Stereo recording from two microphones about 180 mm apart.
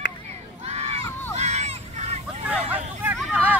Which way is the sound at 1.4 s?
35° right (ahead or behind).